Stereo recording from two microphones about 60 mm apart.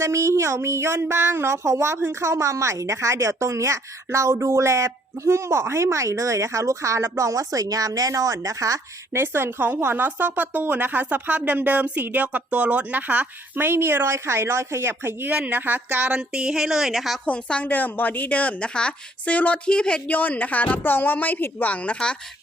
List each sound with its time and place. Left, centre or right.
0.0 s speech: right
2.0 s a woman's voice: right
9.1 s speech: right
13.7 s speech: right
16.1 s speech: centre
17.2 s a woman's voice: left
17.7 s a woman's voice: left; by 20.0 s centre
20.1 s a woman's voice: left